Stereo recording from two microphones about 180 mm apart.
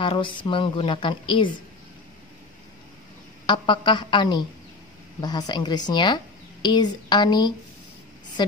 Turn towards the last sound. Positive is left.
turn(degrees=25)  # may be behind; listen again after turning